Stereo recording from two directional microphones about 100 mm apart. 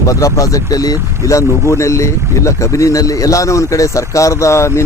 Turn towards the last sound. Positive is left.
turn(degrees=30)  # may be behind; listen again after turning